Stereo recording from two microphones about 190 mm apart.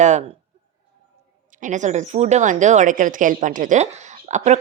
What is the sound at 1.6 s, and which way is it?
A woman's voice, 40° right (ahead or behind).